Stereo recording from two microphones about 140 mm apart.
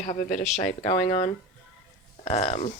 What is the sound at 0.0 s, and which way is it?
Speech, 55° left (ahead or behind).